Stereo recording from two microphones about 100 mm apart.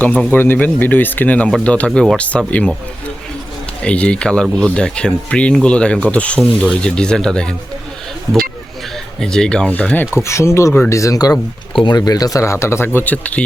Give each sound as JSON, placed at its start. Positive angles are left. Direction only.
{"t": 0.3, "sound": "speech", "side_deg": 20}
{"t": 3.8, "sound": "speech", "side_deg": 10}
{"t": 9.2, "sound": "speech", "side_deg": 5}
{"t": 10.2, "sound": "speech", "side_deg": 30}
{"t": 11.7, "sound": "speech", "side_deg": 60}
{"t": 11.9, "sound": "speech", "side_deg": 40}